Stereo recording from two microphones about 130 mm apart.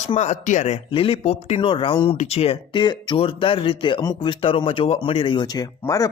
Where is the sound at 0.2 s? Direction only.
60° left (ahead or behind).